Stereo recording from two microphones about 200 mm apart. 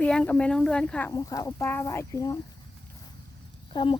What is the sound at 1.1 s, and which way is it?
Speech, 20° left (ahead or behind).